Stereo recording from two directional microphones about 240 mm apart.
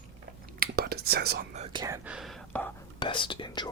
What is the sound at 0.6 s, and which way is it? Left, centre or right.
Whispering, right.